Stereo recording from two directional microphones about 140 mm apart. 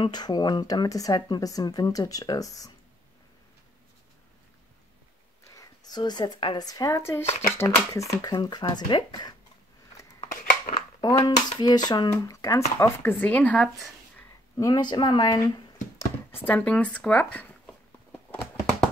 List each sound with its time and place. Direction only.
0.0 s a woman's voice: 30° left (ahead or behind)
5.4 s a woman's voice: 25° left (ahead or behind)
10.2 s a sound: 70° left (ahead or behind)
10.7 s a woman's voice: 30° left (ahead or behind); by 13.7 s 10° left (ahead or behind)
14.6 s speech: 30° left (ahead or behind)
16.0 s speech: 15° left (ahead or behind)
18.1 s a sound: 10° left (ahead or behind)